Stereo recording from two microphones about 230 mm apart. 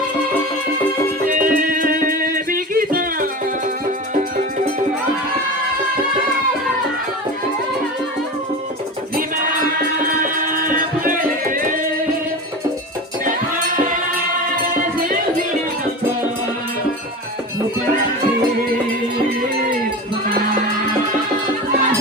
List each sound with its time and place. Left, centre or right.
1.4 s music: right
10.0 s music: right